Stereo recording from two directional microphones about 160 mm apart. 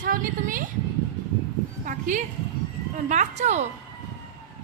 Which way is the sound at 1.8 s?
55° right (ahead or behind).